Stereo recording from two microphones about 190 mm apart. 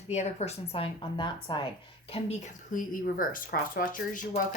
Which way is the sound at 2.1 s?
35° left (ahead or behind).